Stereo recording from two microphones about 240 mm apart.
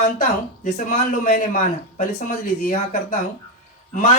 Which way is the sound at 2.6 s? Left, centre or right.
Left.